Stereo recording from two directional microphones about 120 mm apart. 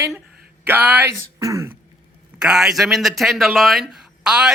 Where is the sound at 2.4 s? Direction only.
5° right (ahead or behind).